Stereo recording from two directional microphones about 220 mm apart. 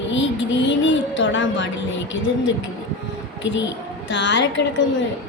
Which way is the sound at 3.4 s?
55° left (ahead or behind).